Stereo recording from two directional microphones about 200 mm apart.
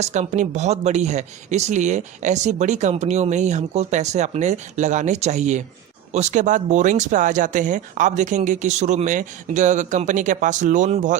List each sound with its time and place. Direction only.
0.0 s speech: 35° right (ahead or behind)